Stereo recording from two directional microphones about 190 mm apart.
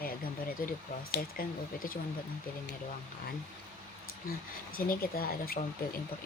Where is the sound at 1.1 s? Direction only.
50° left (ahead or behind).